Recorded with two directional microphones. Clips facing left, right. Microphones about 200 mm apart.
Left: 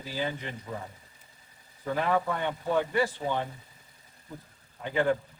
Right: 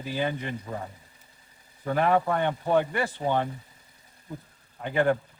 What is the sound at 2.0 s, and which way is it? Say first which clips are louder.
Speech: right 5 dB; 55° right (ahead or behind).